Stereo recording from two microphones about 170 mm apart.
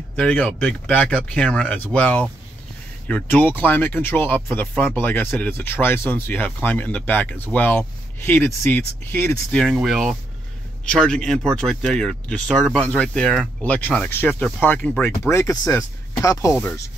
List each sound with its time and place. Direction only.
0.1 s speech: 5° left (ahead or behind)